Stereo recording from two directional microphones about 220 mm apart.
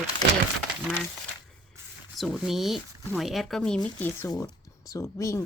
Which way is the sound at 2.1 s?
Centre (ahead or behind).